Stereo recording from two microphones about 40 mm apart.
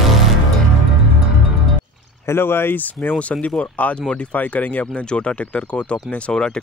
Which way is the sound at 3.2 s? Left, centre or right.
Left.